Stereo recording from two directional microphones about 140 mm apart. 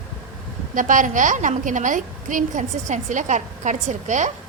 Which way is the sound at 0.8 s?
65° right (ahead or behind).